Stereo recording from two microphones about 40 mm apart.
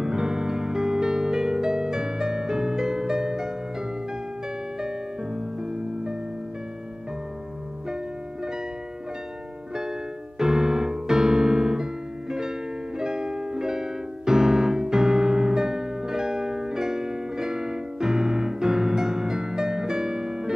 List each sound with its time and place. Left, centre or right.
0.0 s music: centre
4.8 s music: centre
10.4 s piano: centre